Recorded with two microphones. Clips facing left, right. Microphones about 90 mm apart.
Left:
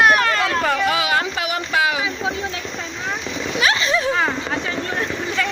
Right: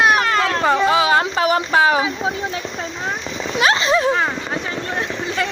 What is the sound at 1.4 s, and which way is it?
Boat, 35° right (ahead or behind).